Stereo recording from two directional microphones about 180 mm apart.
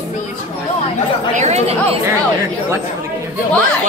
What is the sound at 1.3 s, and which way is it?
Speech, 40° right (ahead or behind).